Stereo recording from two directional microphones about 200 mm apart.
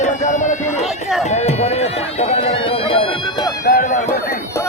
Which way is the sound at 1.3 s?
30° left (ahead or behind).